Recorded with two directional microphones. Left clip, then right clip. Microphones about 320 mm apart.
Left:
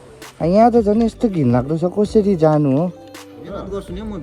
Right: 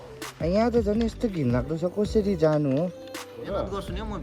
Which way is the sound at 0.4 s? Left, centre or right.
Centre.